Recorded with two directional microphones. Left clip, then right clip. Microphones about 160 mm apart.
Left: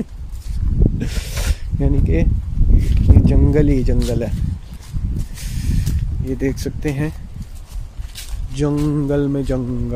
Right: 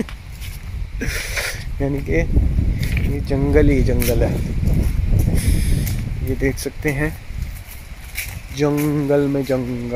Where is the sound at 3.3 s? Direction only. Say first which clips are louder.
Right 3 dB; 15° left (ahead or behind).